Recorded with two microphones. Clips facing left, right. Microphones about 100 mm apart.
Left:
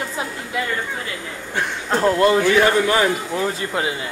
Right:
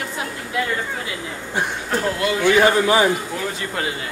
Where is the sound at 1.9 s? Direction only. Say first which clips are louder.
Left 7 dB; 35° left (ahead or behind).